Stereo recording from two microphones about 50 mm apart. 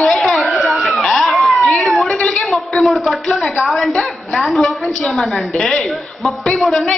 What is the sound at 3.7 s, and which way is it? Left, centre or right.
Speech, centre.